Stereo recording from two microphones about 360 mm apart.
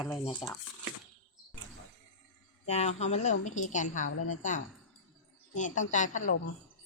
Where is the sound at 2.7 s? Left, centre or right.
Centre.